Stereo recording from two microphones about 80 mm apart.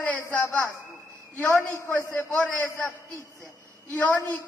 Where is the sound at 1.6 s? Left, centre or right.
Centre.